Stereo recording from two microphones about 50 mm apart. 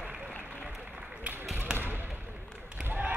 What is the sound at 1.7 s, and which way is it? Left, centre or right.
Basketball bounce, right.